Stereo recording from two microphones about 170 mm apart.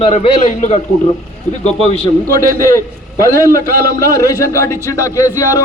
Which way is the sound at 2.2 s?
55° right (ahead or behind).